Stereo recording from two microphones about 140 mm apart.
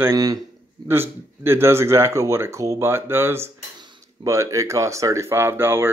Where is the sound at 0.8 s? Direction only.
15° right (ahead or behind).